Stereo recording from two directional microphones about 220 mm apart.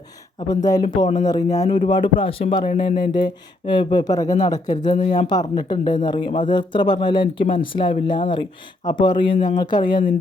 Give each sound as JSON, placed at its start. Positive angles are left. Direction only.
{"t": 0.4, "sound": "speech", "side_deg": 15}
{"t": 1.6, "sound": "speech", "side_deg": 30}